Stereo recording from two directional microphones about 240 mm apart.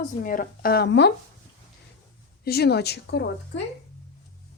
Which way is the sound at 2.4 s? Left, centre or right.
Left.